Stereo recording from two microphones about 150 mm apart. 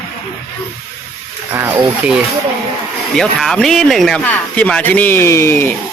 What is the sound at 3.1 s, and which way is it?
Speech, 5° left (ahead or behind).